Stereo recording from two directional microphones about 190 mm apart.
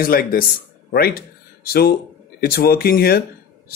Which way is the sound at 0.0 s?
50° left (ahead or behind).